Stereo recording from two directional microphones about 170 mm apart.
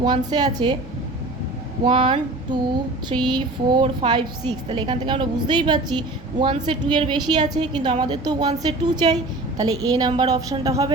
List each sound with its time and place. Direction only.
0.0 s a woman's voice: 25° right (ahead or behind)
1.8 s a woman's voice: 25° right (ahead or behind)